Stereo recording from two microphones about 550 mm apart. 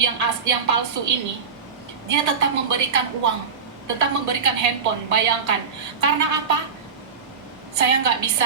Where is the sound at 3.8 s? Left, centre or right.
Right.